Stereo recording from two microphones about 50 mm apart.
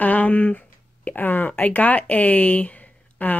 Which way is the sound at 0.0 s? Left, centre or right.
Left.